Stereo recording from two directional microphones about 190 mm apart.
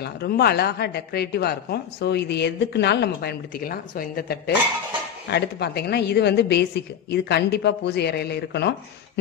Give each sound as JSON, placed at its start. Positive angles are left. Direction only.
{"t": 0.0, "sound": "a woman's voice", "side_deg": 55}